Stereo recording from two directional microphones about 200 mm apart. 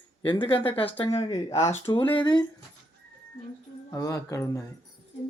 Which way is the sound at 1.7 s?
30° left (ahead or behind).